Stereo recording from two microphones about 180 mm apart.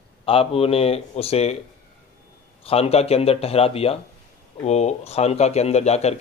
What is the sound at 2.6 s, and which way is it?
A man's voice, 35° left (ahead or behind).